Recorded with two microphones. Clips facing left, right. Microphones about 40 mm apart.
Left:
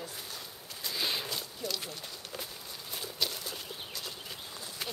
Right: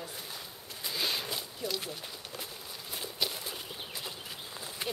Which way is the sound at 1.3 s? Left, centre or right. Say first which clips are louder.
Right 1 dB; centre.